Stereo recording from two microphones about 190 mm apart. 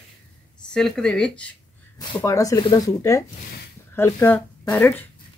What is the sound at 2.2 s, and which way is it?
Speech, 15° left (ahead or behind).